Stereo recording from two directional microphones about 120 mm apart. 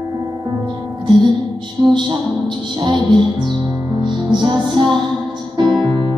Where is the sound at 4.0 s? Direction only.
40° right (ahead or behind).